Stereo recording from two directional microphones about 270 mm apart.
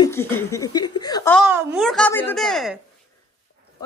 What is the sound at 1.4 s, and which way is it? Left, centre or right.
A woman's voice, centre.